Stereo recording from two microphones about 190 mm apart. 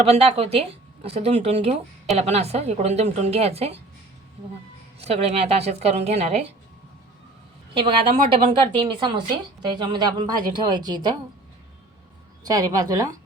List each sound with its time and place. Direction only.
0.0 s a woman's voice: 30° right (ahead or behind)
4.9 s a woman's voice: 30° right (ahead or behind)
7.7 s a woman's voice: 25° right (ahead or behind)
12.5 s a woman's voice: 20° right (ahead or behind)